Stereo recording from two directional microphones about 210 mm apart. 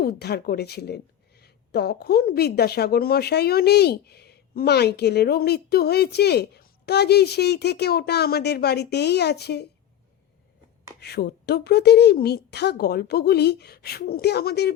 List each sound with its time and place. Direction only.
0.0 s speech: 50° left (ahead or behind)
11.0 s speech: 50° left (ahead or behind)